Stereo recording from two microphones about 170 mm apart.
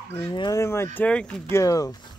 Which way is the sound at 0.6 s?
15° left (ahead or behind).